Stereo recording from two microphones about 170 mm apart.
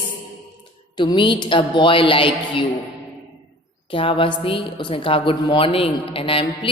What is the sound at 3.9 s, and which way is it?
A woman's voice, 30° left (ahead or behind).